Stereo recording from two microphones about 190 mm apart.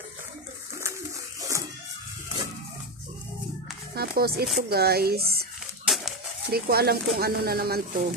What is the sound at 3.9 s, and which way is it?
Speech, 55° right (ahead or behind).